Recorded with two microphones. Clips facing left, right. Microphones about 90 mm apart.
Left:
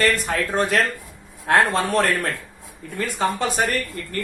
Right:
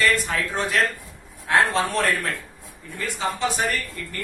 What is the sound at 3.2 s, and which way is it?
Speech, 50° left (ahead or behind).